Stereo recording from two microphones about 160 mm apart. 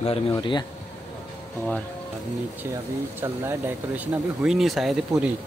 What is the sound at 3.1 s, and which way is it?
Speech, 15° right (ahead or behind).